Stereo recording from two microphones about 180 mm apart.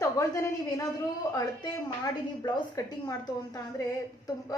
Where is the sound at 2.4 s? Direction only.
20° left (ahead or behind).